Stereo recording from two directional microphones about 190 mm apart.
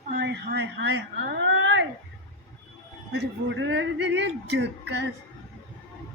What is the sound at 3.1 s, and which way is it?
Speech, 70° right (ahead or behind).